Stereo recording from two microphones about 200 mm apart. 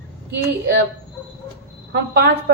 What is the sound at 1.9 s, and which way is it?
Speech, 50° right (ahead or behind).